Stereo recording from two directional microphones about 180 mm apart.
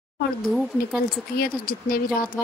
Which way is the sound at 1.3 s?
55° left (ahead or behind).